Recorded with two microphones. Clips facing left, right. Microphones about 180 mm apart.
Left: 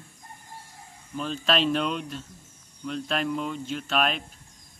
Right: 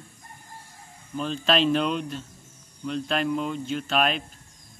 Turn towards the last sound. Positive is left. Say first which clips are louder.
# right 2 dB
turn(degrees=0)  # may be behind; listen again after turning